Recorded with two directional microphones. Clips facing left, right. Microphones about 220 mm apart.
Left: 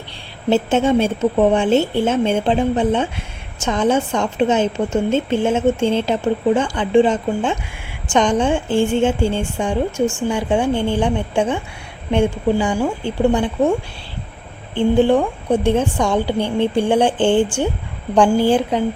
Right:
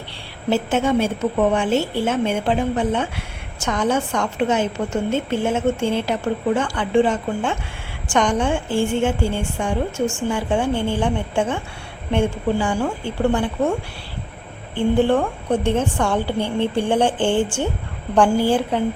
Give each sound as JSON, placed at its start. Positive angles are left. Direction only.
{"t": 0.5, "sound": "a woman's voice", "side_deg": 25}
{"t": 14.8, "sound": "a woman's voice", "side_deg": 15}